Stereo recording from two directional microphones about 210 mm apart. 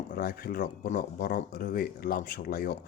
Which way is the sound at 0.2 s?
45° left (ahead or behind).